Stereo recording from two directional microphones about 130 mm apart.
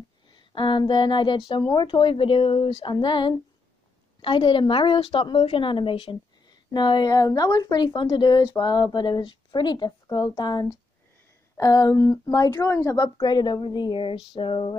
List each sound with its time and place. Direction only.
0.3 s a woman's voice: 40° left (ahead or behind)
11.5 s a sound: 25° left (ahead or behind)
12.0 s a woman's voice: 25° left (ahead or behind); by 14.8 s 40° left (ahead or behind)